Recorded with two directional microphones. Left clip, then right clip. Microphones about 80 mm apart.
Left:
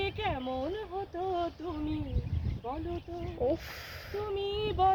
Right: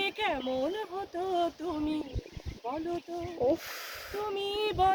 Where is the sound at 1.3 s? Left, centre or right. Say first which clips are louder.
Right 4 dB; centre.